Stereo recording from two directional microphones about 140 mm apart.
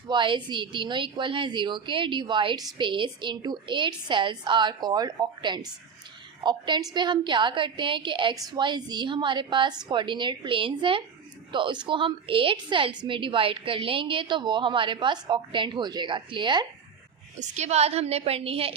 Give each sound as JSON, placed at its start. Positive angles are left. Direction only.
{"t": 0.1, "sound": "a woman's voice", "side_deg": -35}
{"t": 17.4, "sound": "a woman's voice", "side_deg": -55}